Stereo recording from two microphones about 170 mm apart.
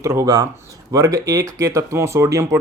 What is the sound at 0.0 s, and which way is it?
Speech, 15° right (ahead or behind).